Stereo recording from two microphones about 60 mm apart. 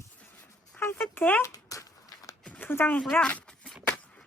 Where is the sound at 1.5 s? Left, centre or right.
Left.